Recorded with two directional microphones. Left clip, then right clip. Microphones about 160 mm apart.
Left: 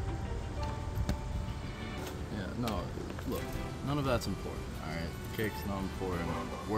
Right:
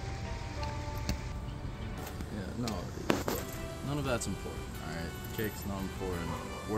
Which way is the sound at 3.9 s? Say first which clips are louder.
Left 2 dB; 5° right (ahead or behind).